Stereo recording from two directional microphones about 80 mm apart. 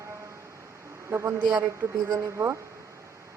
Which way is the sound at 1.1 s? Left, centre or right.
Right.